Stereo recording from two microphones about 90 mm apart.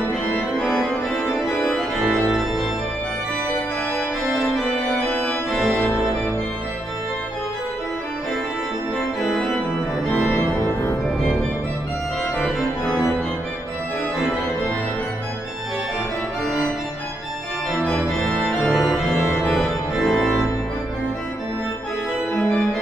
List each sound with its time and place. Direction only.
0.6 s organ: 10° left (ahead or behind)
0.8 s organ: centre (ahead or behind)
4.9 s organ: 15° left (ahead or behind)
9.2 s organ: 5° left (ahead or behind)
10.3 s organ: 20° left (ahead or behind)
12.4 s organ: centre (ahead or behind)
18.4 s organ: centre (ahead or behind)
19.4 s organ: 10° left (ahead or behind)
22.4 s organ: 10° left (ahead or behind)